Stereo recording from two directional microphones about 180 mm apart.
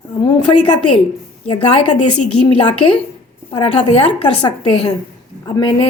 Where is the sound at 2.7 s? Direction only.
35° left (ahead or behind).